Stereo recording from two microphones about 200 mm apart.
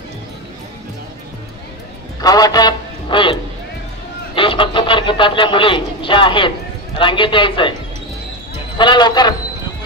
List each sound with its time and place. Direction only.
2.2 s a man's voice: 20° left (ahead or behind)
4.4 s a man's voice: 25° left (ahead or behind)
8.7 s a man's voice: 20° left (ahead or behind)